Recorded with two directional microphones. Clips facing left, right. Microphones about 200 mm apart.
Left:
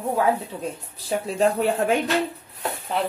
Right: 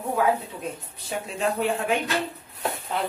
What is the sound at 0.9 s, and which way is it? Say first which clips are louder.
A woman's voice: left 10 dB; 35° left (ahead or behind).